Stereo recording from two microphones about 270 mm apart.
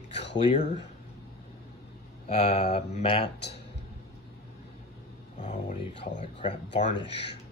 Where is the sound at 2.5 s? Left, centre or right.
Left.